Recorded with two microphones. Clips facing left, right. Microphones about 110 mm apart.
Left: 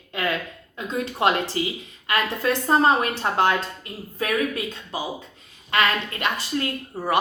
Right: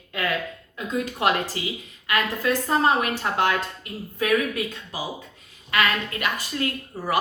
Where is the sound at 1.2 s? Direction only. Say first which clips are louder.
Left 3 dB; 30° left (ahead or behind).